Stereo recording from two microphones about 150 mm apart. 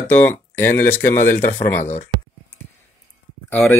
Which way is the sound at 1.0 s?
65° left (ahead or behind).